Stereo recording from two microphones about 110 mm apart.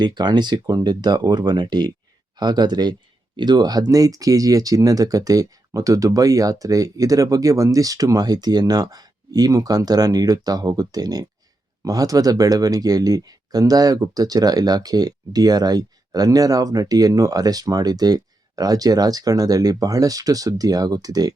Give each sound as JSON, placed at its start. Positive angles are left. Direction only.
{"t": 0.0, "sound": "speech", "side_deg": -40}